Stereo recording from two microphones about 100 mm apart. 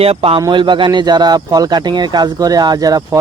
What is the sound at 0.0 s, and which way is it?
Speech, 75° right (ahead or behind).